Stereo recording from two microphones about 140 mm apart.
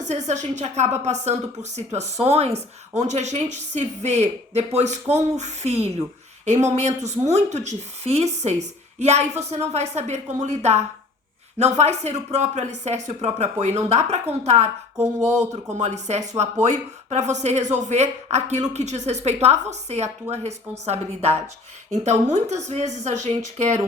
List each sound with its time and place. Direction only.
0.0 s a woman's voice: 55° right (ahead or behind)